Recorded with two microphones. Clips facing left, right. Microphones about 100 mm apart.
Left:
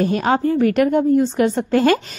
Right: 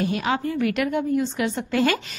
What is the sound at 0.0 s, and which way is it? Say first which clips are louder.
A woman's voice: left 6 dB; 40° left (ahead or behind).